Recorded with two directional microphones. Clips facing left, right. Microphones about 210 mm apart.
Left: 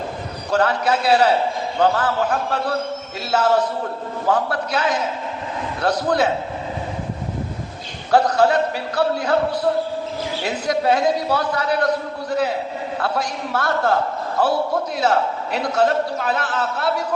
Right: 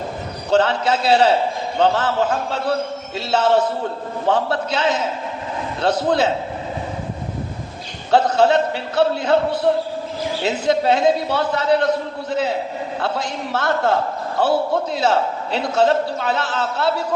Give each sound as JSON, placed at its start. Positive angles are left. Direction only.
{"t": 0.5, "sound": "a man's voice", "side_deg": -25}
{"t": 8.1, "sound": "a man's voice", "side_deg": -25}
{"t": 14.9, "sound": "a man's voice", "side_deg": -30}